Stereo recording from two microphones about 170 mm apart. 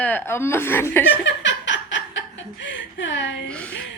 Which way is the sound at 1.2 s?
90° left.